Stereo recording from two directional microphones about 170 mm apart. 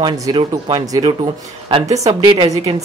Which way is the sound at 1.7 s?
35° right (ahead or behind).